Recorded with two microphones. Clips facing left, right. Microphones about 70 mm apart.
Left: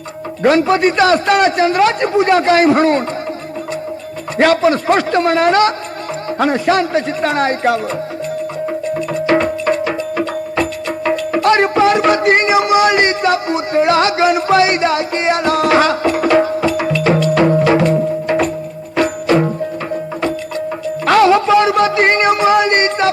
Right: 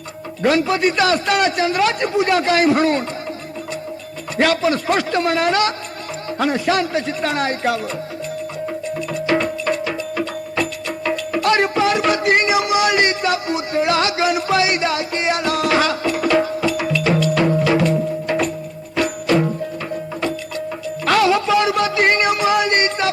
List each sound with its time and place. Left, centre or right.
0.4 s a man's voice: left
4.4 s a man's voice: left
8.6 s music: left
21.0 s music: left